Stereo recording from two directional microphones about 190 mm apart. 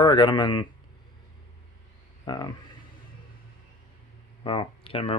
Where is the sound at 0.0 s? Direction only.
25° left (ahead or behind).